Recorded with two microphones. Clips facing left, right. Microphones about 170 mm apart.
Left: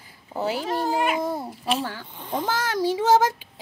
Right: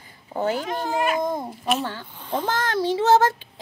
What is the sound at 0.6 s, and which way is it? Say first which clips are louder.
Speech: left 2 dB; 35° left (ahead or behind).